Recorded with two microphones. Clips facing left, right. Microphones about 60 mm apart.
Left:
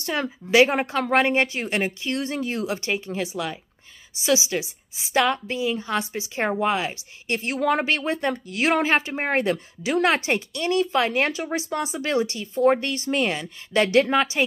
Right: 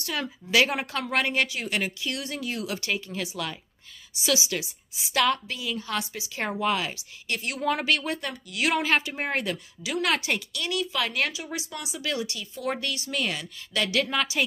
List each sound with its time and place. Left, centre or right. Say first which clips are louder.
0.0 s a woman's voice: left 5 dB; left